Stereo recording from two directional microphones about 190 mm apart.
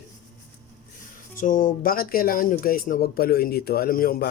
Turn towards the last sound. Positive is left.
turn(degrees=50)  # may be behind; listen again after turning